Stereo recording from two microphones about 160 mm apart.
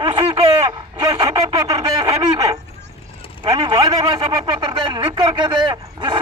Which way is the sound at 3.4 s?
30° right (ahead or behind).